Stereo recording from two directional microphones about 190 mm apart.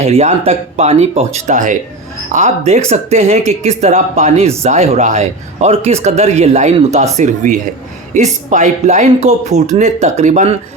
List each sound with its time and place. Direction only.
0.0 s speech: 35° right (ahead or behind)